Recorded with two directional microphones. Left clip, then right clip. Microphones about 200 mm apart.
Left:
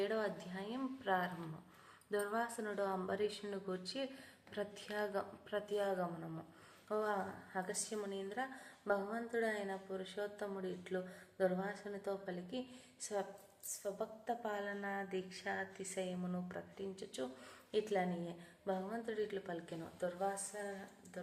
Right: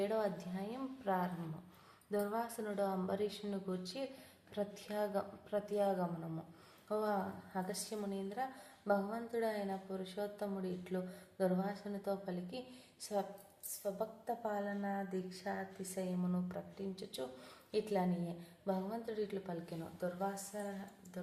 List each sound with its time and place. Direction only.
0.0 s a woman's voice: centre (ahead or behind)
18.6 s a woman's voice: centre (ahead or behind)